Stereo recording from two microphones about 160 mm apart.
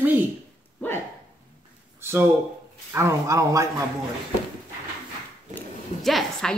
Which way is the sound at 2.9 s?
20° right (ahead or behind).